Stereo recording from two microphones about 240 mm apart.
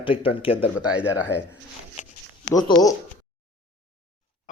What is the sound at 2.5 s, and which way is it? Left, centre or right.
Speech, centre.